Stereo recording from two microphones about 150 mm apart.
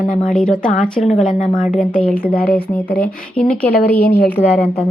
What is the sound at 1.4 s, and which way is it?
Speech, 60° left (ahead or behind).